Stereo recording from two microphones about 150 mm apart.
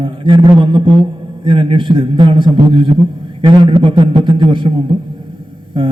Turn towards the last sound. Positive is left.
turn(degrees=-30)  # may be behind; listen again after turning